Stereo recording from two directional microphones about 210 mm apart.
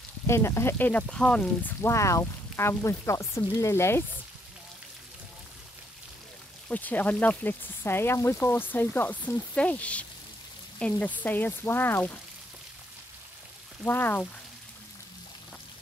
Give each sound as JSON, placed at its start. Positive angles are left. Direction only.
{"t": 0.3, "sound": "speech", "side_deg": 10}
{"t": 6.7, "sound": "speech", "side_deg": 10}
{"t": 13.8, "sound": "speech", "side_deg": 10}